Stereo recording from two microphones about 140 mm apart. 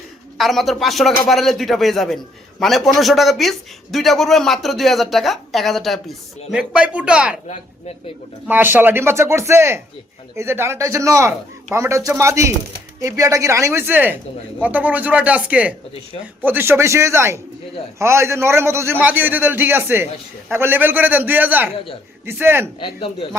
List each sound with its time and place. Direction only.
0.3 s a man's voice: centre (ahead or behind)
7.4 s speech: 50° left (ahead or behind)
8.4 s a man's voice: 15° right (ahead or behind)
22.8 s speech: 40° left (ahead or behind)